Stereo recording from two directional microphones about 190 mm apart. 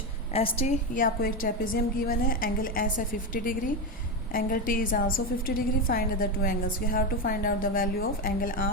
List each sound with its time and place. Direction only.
0.6 s a woman's voice: 45° left (ahead or behind)